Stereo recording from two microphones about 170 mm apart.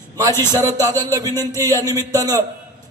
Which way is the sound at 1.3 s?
15° left (ahead or behind).